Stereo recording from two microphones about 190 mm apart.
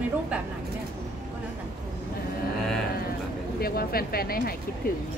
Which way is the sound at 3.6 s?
50° left (ahead or behind).